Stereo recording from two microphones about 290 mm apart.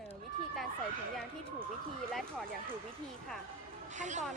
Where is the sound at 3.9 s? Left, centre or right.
Right.